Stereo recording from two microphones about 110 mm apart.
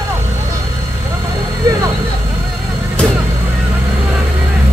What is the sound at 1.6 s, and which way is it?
Vehicle, 35° right (ahead or behind).